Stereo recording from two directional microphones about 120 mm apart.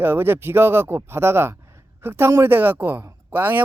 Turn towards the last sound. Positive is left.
turn(degrees=-15)  # may be behind; listen again after turning